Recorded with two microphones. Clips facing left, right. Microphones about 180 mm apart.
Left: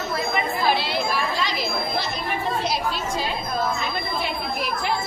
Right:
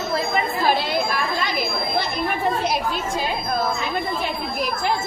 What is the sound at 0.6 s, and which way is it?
Chatter, 45° right (ahead or behind).